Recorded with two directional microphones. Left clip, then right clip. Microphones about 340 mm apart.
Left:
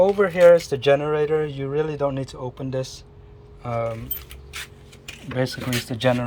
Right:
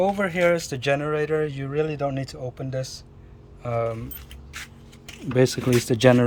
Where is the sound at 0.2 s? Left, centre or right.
Centre.